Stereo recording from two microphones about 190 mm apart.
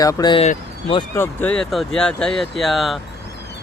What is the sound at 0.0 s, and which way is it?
Speech, 20° left (ahead or behind).